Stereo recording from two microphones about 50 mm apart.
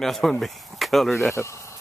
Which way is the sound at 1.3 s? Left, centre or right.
Left.